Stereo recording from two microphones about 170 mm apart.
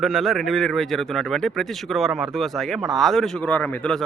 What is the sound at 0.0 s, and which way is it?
Speech, centre (ahead or behind).